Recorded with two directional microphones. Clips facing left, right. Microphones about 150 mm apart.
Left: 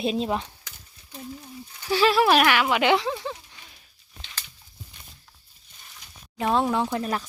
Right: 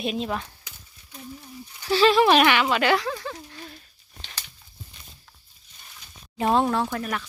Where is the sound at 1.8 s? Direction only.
10° left (ahead or behind).